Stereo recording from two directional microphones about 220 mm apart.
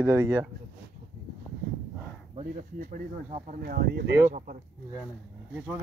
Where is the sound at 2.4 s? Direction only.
35° right (ahead or behind).